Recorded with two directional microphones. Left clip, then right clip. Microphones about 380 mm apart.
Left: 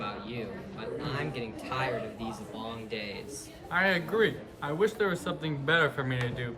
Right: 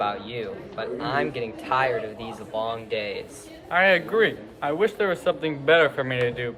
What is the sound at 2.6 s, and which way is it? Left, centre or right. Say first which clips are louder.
Speech: right 10 dB; centre.